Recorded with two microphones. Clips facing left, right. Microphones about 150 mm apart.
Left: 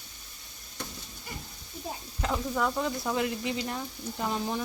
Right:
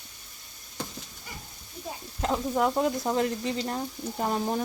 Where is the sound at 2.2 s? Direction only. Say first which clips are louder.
Right 4 dB; 30° right (ahead or behind).